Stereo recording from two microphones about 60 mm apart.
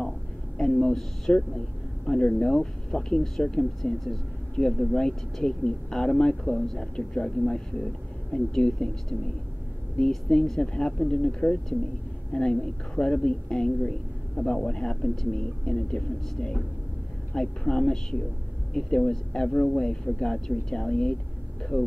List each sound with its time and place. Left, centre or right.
0.6 s speech: centre
9.9 s speech: centre